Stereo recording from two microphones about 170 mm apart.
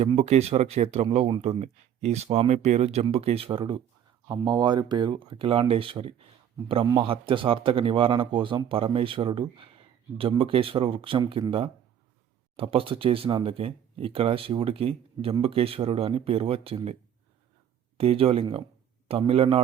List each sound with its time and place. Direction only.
0.0 s speech: 40° right (ahead or behind)
12.5 s speech: 35° right (ahead or behind)